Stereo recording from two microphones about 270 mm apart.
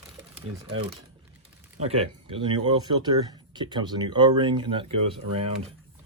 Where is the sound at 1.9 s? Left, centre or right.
Right.